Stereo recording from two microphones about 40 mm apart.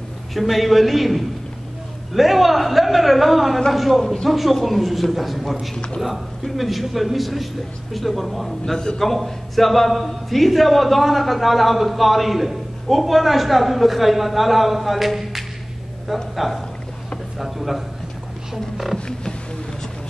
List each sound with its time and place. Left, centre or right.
0.3 s a man's voice: centre
4.0 s speech: centre
4.3 s a man's voice: centre
8.7 s speech: centre
9.0 s a man's voice: centre